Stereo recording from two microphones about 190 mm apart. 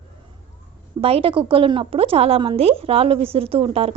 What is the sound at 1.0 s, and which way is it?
A woman's voice, 30° right (ahead or behind).